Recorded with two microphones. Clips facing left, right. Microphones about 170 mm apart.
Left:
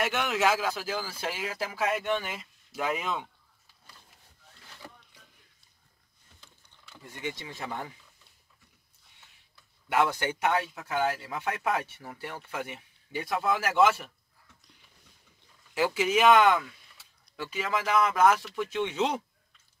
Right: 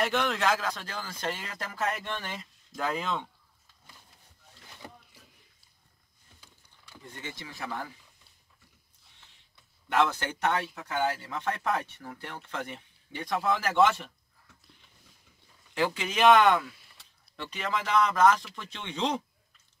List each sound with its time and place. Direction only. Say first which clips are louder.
0.0 s speech: left 1 dB; 5° left (ahead or behind)
7.1 s speech: left 5 dB; 15° left (ahead or behind)
9.8 s speech: even; 10° left (ahead or behind)
15.7 s speech: left 4 dB; 5° left (ahead or behind)